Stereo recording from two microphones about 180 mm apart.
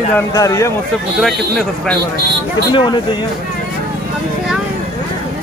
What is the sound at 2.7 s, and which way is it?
Speech, 25° left (ahead or behind).